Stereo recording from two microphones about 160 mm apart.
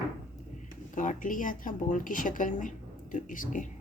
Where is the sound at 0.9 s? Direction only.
55° left (ahead or behind).